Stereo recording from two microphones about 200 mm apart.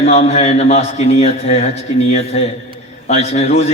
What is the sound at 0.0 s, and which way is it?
A man's voice, 30° left (ahead or behind).